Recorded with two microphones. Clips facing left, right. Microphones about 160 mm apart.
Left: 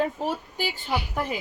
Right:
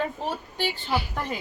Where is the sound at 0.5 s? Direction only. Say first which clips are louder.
Right 1 dB; 15° left (ahead or behind).